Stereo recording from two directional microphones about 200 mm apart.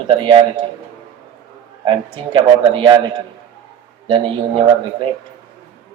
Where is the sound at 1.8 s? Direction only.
25° right (ahead or behind).